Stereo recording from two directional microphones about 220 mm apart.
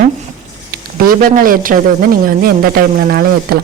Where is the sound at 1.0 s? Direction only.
40° right (ahead or behind).